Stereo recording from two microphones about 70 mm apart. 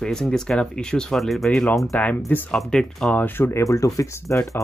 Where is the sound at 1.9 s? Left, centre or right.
Left.